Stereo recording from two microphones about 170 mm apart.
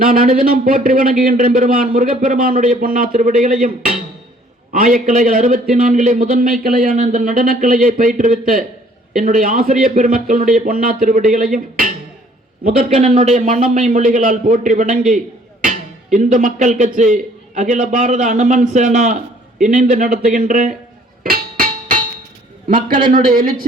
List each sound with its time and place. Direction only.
0.0 s a man's voice: 55° right (ahead or behind)
21.2 s music: 60° right (ahead or behind)
23.1 s speech: 55° right (ahead or behind)